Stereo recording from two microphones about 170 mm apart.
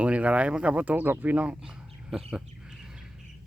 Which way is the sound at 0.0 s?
5° right (ahead or behind).